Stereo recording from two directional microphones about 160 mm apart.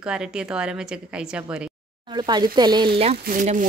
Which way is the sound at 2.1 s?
30° right (ahead or behind).